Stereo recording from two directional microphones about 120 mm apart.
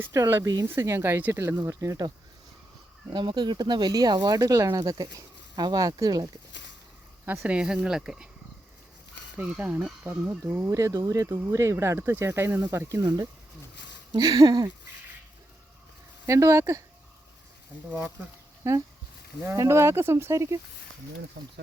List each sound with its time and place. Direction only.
0.0 s speech: 20° right (ahead or behind)
7.3 s speech: 15° right (ahead or behind)
9.4 s speech: 10° right (ahead or behind); by 14.7 s 35° right (ahead or behind)
16.2 s speech: 25° right (ahead or behind)
18.6 s speech: 25° right (ahead or behind)